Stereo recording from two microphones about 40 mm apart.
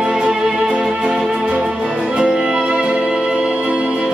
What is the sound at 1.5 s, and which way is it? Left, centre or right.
Music, right.